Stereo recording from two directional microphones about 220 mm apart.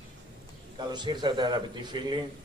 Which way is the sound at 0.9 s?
20° right (ahead or behind).